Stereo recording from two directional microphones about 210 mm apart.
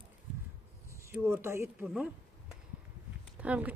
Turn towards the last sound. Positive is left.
turn(degrees=-5)  # may be behind; listen again after turning